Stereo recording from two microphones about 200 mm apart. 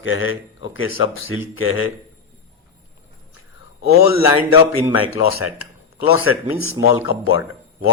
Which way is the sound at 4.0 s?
90° left.